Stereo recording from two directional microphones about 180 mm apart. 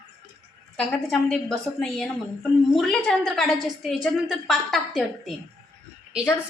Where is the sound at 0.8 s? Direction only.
5° left (ahead or behind).